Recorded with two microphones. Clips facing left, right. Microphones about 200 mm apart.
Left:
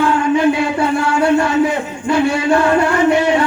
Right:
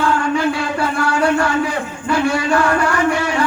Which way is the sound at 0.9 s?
20° left (ahead or behind).